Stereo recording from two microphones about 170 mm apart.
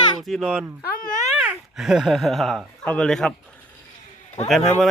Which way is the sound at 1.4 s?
5° right (ahead or behind).